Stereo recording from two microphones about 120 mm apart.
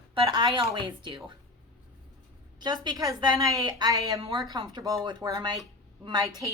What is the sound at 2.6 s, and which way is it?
A woman's voice, 35° right (ahead or behind).